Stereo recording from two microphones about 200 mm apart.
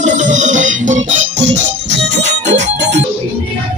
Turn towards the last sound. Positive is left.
turn(degrees=-35)  # may be behind; listen again after turning